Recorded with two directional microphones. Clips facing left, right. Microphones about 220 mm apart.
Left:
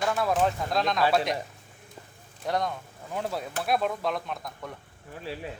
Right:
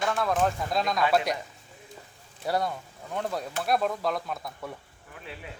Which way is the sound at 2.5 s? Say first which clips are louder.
Right 1 dB; 5° right (ahead or behind).